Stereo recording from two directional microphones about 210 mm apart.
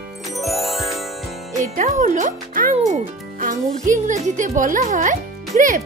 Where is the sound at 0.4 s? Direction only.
Centre (ahead or behind).